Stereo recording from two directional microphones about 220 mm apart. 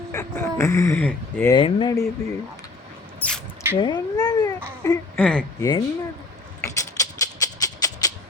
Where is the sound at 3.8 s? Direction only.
20° left (ahead or behind).